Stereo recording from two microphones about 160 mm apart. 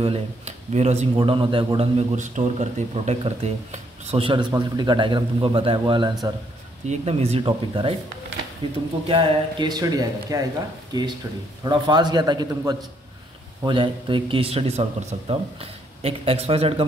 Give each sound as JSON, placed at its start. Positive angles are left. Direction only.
{"t": 0.0, "sound": "speech", "side_deg": -40}
{"t": 6.9, "sound": "speech", "side_deg": -40}
{"t": 9.0, "sound": "speech", "side_deg": -35}